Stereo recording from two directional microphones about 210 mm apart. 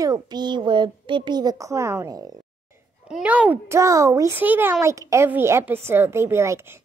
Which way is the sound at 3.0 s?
5° right (ahead or behind).